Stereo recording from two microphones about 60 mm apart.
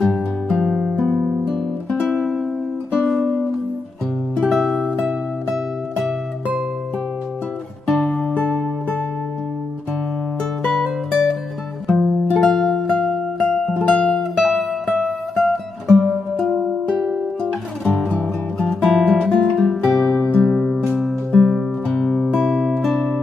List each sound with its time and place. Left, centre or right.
0.0 s music: centre
4.5 s music: centre
8.0 s music: centre
8.4 s music: left
10.6 s music: centre
12.4 s music: centre
13.9 s music: centre
14.3 s music: centre
16.3 s music: centre
18.2 s music: centre
20.5 s music: centre
20.8 s music: centre